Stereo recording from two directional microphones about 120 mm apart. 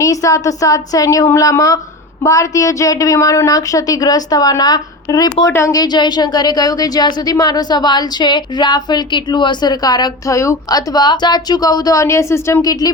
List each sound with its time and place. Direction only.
0.0 s a woman's voice: 25° left (ahead or behind)